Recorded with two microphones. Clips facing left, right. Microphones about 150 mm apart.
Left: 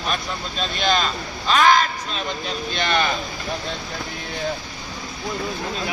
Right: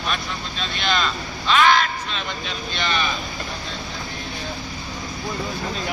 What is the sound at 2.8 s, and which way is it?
Speech, 50° left (ahead or behind).